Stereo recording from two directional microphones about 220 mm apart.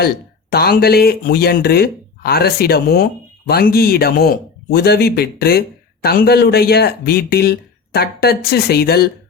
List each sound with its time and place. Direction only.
0.5 s speech: 45° left (ahead or behind)